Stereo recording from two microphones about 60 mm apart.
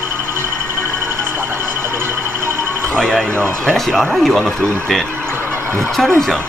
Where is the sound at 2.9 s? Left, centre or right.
Centre.